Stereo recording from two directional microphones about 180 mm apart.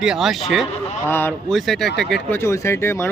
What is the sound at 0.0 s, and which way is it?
Speech, centre (ahead or behind).